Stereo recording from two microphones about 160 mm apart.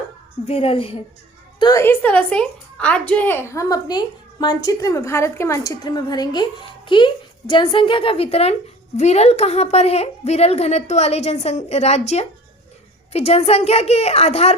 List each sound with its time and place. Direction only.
0.4 s a woman's voice: 35° left (ahead or behind)
1.5 s a woman's voice: 25° left (ahead or behind)
1.8 s a woman's voice: 10° left (ahead or behind); by 14.5 s 40° left (ahead or behind)